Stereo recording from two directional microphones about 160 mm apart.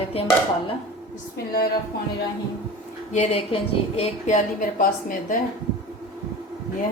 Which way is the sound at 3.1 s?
45° left (ahead or behind).